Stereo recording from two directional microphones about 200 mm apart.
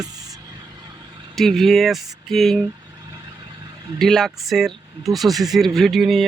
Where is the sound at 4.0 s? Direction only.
Centre (ahead or behind).